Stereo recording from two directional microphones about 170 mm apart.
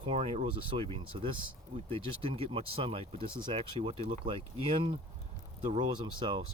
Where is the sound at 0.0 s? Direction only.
30° right (ahead or behind).